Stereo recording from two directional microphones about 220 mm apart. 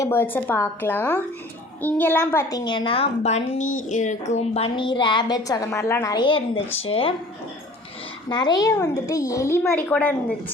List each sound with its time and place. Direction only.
0.0 s a child's voice: 10° left (ahead or behind); by 7.1 s 25° left (ahead or behind)
8.3 s a child's voice: 20° left (ahead or behind)